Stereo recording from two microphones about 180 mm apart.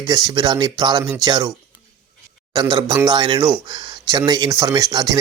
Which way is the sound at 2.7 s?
20° right (ahead or behind).